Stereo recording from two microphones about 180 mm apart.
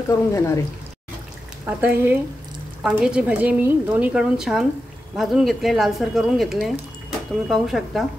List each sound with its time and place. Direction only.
0.3 s speech: 15° left (ahead or behind)
1.7 s speech: 10° right (ahead or behind)